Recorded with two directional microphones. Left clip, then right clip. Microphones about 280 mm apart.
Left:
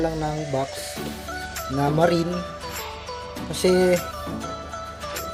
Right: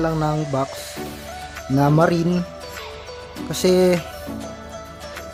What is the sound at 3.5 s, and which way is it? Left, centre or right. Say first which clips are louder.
Speech: right 2 dB; centre.